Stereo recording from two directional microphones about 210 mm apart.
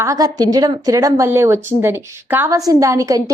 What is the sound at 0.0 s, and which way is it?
A woman's voice, 15° right (ahead or behind).